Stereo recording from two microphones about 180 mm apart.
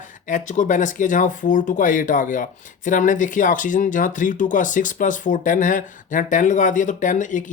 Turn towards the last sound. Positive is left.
turn(degrees=45)  # may be behind; listen again after turning